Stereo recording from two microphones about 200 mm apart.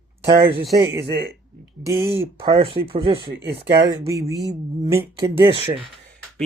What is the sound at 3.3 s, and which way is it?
Speech, 55° right (ahead or behind).